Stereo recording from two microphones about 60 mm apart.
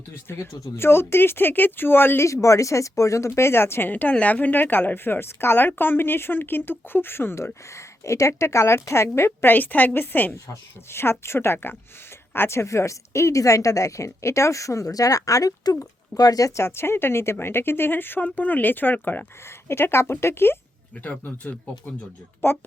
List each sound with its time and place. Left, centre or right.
0.3 s speech: left
2.2 s a woman's voice: left
9.5 s speech: left
10.9 s a woman's voice: left
16.6 s speech: left
19.6 s speech: left
21.0 s speech: left
22.4 s speech: left